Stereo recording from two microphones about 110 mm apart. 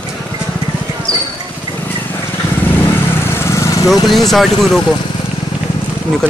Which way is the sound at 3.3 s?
25° left (ahead or behind).